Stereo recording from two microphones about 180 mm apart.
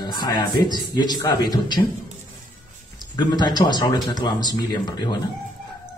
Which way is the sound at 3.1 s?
25° left (ahead or behind).